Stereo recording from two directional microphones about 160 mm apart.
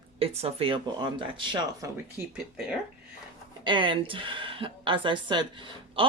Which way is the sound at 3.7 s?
30° right (ahead or behind).